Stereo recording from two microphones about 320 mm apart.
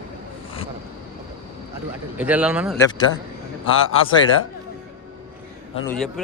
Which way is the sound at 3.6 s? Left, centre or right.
Left.